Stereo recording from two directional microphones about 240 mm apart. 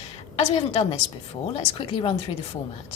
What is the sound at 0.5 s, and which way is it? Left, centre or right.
Speech, left.